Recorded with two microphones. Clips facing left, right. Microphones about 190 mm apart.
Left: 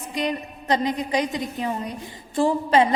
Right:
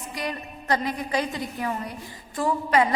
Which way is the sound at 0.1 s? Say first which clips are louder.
Left 6 dB; 20° left (ahead or behind).